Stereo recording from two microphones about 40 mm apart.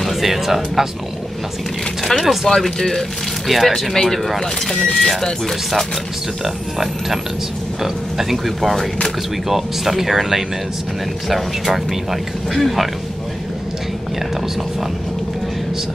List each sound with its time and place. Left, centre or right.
0.0 s speech: centre
2.0 s speech: centre
3.9 s speech: centre
4.9 s speech: centre